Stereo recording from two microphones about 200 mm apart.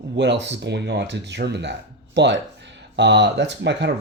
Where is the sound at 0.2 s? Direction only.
60° right (ahead or behind).